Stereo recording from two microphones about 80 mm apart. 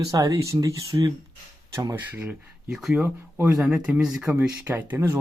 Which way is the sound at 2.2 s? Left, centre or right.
Centre.